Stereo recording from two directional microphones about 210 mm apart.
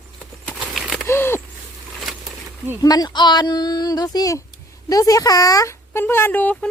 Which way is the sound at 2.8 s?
20° left (ahead or behind).